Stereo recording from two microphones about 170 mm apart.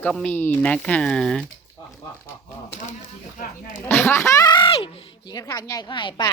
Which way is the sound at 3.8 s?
10° left (ahead or behind).